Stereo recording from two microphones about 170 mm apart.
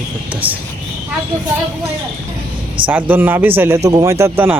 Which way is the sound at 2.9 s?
10° right (ahead or behind).